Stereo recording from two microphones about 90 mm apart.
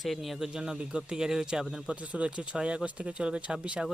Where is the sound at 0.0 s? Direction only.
Centre (ahead or behind).